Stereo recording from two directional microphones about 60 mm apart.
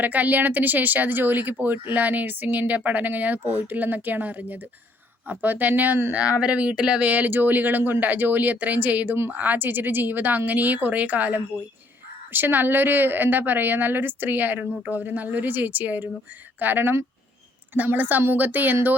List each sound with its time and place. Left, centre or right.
0.0 s a woman's voice: right